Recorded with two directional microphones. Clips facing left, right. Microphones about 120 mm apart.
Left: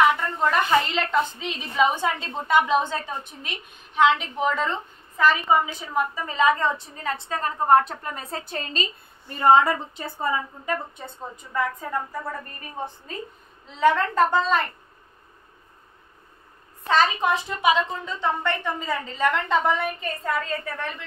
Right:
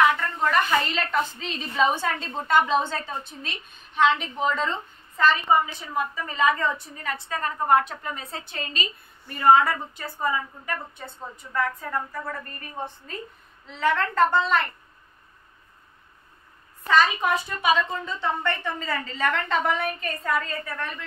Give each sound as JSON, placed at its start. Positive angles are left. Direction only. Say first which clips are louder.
{"t": 0.1, "sound": "a woman's voice", "louder": "left 1 dB", "side_deg": 20}
{"t": 8.0, "sound": "a woman's voice", "louder": "left 2 dB", "side_deg": 45}
{"t": 9.3, "sound": "a woman's voice", "louder": "left 1 dB", "side_deg": 25}
{"t": 13.7, "sound": "a woman's voice", "louder": "left 4 dB", "side_deg": 15}
{"t": 16.8, "sound": "a woman's voice", "louder": "even", "side_deg": 25}